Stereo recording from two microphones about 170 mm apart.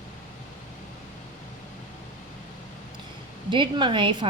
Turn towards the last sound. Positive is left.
turn(degrees=-30)  # may be behind; listen again after turning